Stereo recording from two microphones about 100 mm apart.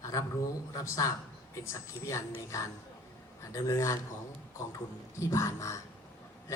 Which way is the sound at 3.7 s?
30° left (ahead or behind).